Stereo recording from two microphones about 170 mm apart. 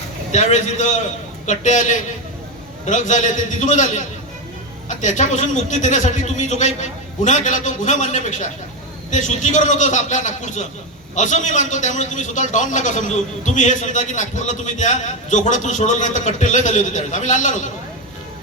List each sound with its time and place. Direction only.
0.3 s a man's voice: 45° left (ahead or behind)